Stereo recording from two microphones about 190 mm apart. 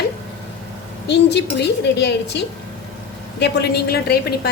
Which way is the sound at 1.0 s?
60° left (ahead or behind).